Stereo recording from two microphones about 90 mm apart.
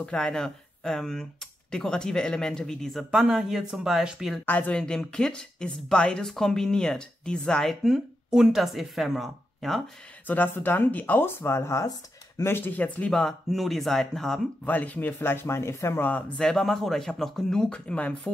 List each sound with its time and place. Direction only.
0.0 s speech: 10° left (ahead or behind)
4.5 s speech: 15° left (ahead or behind)
7.8 s speech: 5° right (ahead or behind)
10.2 s speech: 20° left (ahead or behind); by 14.7 s 5° left (ahead or behind)
14.7 s speech: 20° left (ahead or behind)
16.1 s speech: 15° left (ahead or behind)